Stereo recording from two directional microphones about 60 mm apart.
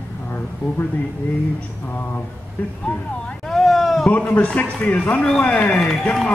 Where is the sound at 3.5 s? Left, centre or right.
Centre.